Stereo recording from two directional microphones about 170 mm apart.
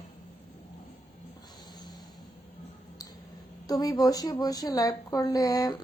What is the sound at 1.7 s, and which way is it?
Music, 25° left (ahead or behind).